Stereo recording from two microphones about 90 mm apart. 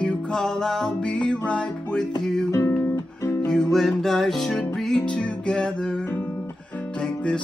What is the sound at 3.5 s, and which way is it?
Music, 5° left (ahead or behind).